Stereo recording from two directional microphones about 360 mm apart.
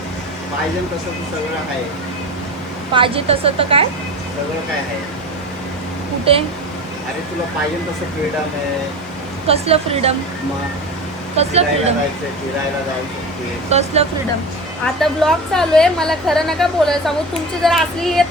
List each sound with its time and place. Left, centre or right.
2.9 s a woman's voice: centre
9.5 s a woman's voice: centre
11.3 s a woman's voice: centre
13.7 s a woman's voice: centre
15.0 s a woman's voice: centre